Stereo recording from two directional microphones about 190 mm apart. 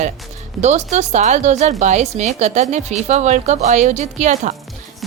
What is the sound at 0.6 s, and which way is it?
Speech, 35° right (ahead or behind).